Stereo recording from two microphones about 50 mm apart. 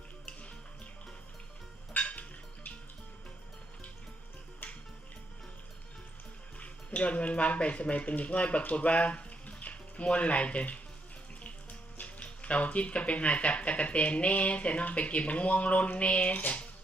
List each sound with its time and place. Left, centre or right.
1.9 s music: left
4.6 s music: left
6.6 s speech: left